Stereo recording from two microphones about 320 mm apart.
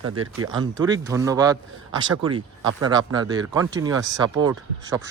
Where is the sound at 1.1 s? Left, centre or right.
Centre.